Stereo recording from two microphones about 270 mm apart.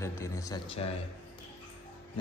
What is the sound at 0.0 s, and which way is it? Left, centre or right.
Speech, centre.